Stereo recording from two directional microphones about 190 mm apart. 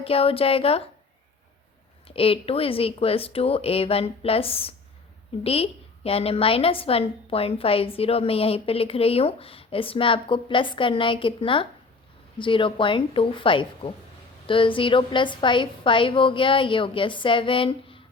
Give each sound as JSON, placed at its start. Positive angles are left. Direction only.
{"t": 0.0, "sound": "speech", "side_deg": 30}
{"t": 2.0, "sound": "a woman's voice", "side_deg": 30}